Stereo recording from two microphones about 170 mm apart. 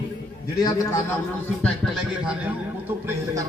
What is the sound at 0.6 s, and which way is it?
Speech, 20° left (ahead or behind).